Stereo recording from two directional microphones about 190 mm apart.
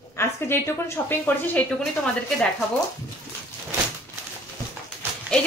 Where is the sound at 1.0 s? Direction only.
10° left (ahead or behind).